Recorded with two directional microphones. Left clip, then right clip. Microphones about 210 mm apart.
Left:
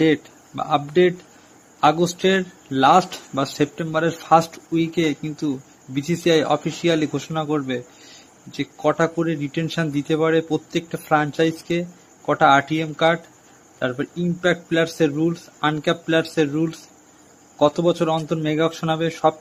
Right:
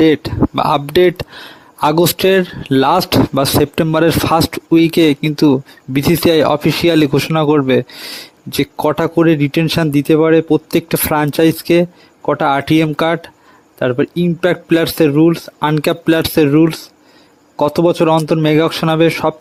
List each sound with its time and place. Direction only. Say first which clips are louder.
0.0 s speech: right 8 dB; 50° right (ahead or behind)